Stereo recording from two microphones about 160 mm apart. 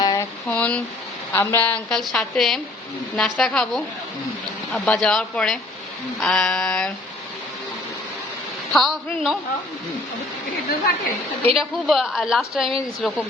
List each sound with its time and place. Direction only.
0.0 s a sound: 20° left (ahead or behind)
0.5 s a woman's voice: 10° left (ahead or behind)
8.7 s a woman's voice: centre (ahead or behind)
11.5 s a woman's voice: centre (ahead or behind)